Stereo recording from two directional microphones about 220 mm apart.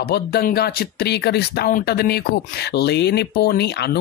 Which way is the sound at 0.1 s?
45° left (ahead or behind).